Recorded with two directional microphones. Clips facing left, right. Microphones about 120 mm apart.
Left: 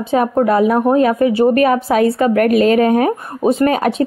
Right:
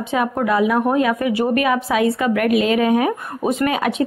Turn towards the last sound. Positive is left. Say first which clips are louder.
# left 5 dB
turn(degrees=40)  # may be behind; listen again after turning